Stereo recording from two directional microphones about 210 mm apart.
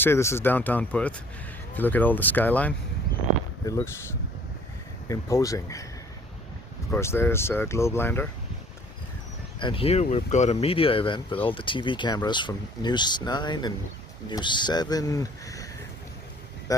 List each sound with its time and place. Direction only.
0.0 s speech: 10° left (ahead or behind)
5.0 s speech: 15° left (ahead or behind)
6.9 s speech: 10° left (ahead or behind)
9.6 s speech: 25° left (ahead or behind)